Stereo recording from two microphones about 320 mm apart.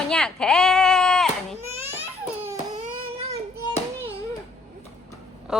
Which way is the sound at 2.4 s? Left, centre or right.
Centre.